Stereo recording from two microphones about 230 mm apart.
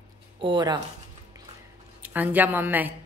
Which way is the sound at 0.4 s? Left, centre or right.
Centre.